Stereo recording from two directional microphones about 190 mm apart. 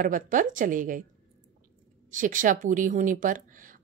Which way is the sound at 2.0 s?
45° right (ahead or behind).